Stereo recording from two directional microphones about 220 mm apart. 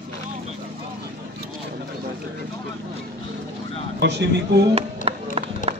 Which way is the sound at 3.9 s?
50° right (ahead or behind).